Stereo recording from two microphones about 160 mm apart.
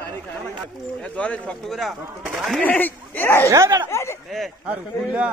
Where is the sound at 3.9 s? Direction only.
15° left (ahead or behind).